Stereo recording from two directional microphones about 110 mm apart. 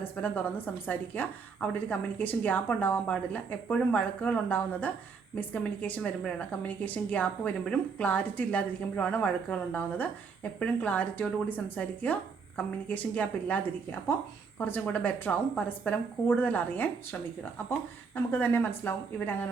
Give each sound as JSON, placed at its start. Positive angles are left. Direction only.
{"t": 0.0, "sound": "a woman's voice", "side_deg": 15}
{"t": 14.6, "sound": "a woman's voice", "side_deg": 15}